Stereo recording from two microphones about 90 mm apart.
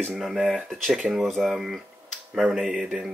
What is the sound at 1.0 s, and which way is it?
Speech, 10° right (ahead or behind).